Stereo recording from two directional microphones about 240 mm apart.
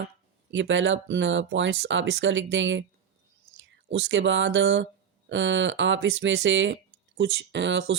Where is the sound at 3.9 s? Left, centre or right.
Right.